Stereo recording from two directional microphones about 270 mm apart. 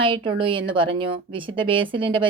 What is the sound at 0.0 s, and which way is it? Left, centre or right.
A woman's voice, centre.